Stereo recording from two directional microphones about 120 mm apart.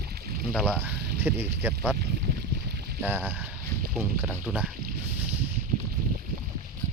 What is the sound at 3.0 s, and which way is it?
Speech, 15° right (ahead or behind).